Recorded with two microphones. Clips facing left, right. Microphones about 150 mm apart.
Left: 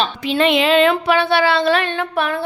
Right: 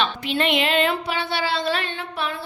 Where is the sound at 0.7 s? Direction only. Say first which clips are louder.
Left 8 dB; 80° left; by 2.4 s 55° left (ahead or behind).